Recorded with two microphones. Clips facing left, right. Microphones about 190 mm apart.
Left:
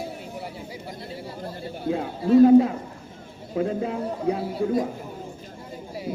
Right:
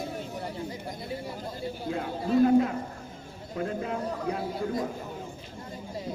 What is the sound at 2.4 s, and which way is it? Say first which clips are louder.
A man's voice: left 7 dB; 25° left (ahead or behind).